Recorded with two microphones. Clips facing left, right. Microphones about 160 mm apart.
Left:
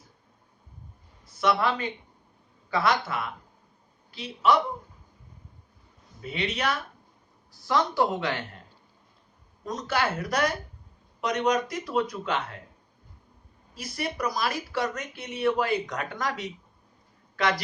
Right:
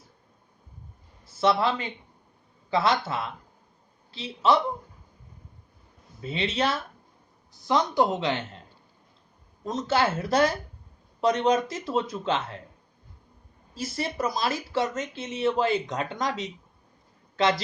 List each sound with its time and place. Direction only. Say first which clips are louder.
1.2 s a man's voice: right 2 dB; 30° right (ahead or behind)
6.2 s speech: right 2 dB; 25° right (ahead or behind)
9.6 s speech: right 3 dB; 25° right (ahead or behind)
13.7 s speech: right 2 dB; 25° right (ahead or behind)